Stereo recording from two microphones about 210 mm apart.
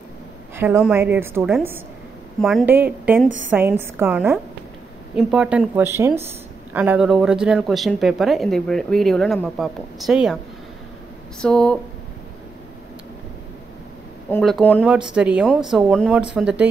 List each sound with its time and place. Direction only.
0.6 s a woman's voice: 5° right (ahead or behind)
11.4 s speech: 5° left (ahead or behind)
14.3 s speech: 5° left (ahead or behind)
15.1 s speech: 5° right (ahead or behind)